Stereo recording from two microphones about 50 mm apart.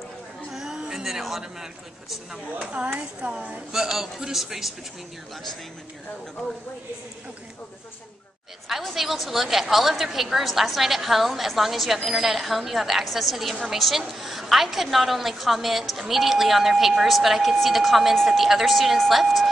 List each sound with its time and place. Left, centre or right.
0.5 s a man's voice: centre
2.7 s speech: right
3.7 s a woman's voice: centre
8.6 s a woman's voice: centre